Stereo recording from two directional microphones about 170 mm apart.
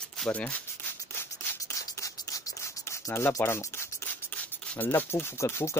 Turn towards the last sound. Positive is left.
turn(degrees=15)  # may be behind; listen again after turning